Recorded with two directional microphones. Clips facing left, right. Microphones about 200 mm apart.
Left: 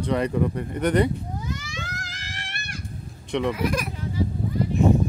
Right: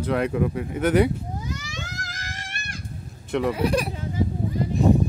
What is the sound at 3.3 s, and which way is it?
Speech, 5° right (ahead or behind).